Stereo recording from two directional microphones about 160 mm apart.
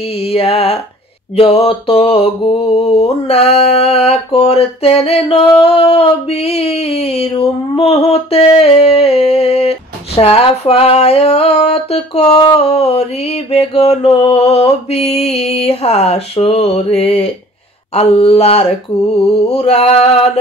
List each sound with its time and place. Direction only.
0.2 s mantra: 40° left (ahead or behind)